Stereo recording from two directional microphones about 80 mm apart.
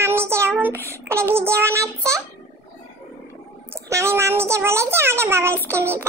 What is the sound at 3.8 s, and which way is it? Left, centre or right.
Speech, right.